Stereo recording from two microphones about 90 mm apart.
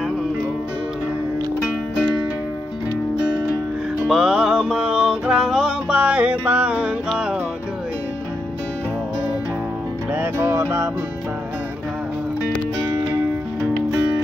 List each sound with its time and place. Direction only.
4.1 s music: 5° right (ahead or behind)
5.9 s music: 15° right (ahead or behind)
10.1 s music: 25° right (ahead or behind)